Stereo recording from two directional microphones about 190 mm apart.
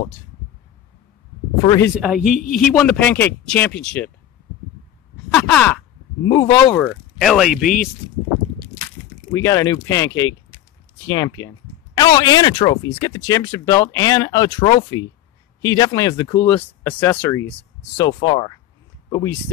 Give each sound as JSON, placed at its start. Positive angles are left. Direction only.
{"t": 1.6, "sound": "speech", "side_deg": 20}
{"t": 2.0, "sound": "a man's voice", "side_deg": -5}
{"t": 2.7, "sound": "a man's voice", "side_deg": 10}
{"t": 5.3, "sound": "speech", "side_deg": 5}
{"t": 6.2, "sound": "speech", "side_deg": 20}
{"t": 6.8, "sound": "speech", "side_deg": 5}
{"t": 7.5, "sound": "speech", "side_deg": 45}
{"t": 9.3, "sound": "speech", "side_deg": 15}
{"t": 17.9, "sound": "speech", "side_deg": 25}